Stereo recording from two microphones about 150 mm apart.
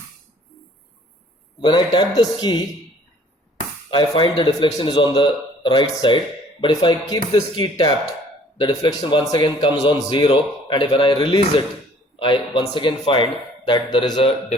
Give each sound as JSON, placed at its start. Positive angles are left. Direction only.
{"t": 1.6, "sound": "a man's voice", "side_deg": 30}
{"t": 3.8, "sound": "a man's voice", "side_deg": 40}